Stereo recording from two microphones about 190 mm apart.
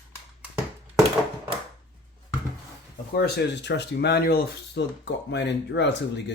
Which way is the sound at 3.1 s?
60° left (ahead or behind).